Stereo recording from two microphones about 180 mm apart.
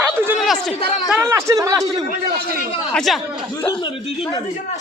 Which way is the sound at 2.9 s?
Centre (ahead or behind).